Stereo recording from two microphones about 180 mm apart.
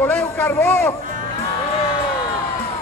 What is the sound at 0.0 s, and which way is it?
Speech, 10° left (ahead or behind).